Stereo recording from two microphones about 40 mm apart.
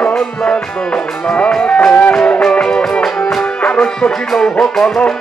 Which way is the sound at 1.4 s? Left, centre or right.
Centre.